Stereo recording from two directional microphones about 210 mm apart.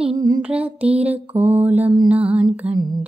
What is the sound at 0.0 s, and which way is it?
Music, 20° right (ahead or behind).